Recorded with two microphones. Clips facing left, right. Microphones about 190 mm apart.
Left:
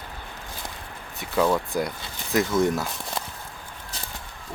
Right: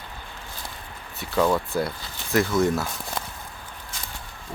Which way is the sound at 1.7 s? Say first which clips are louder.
Right 1 dB; 15° left (ahead or behind).